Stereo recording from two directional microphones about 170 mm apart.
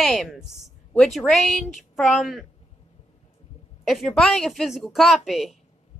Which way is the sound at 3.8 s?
Centre (ahead or behind).